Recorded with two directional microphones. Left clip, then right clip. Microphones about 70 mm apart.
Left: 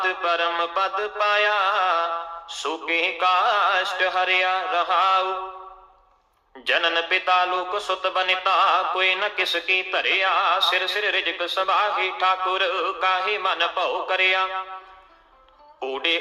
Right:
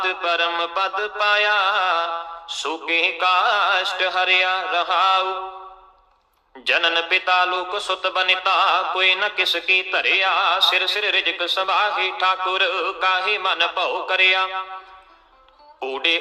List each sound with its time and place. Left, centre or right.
0.0 s speech: right
6.7 s speech: right
15.8 s speech: right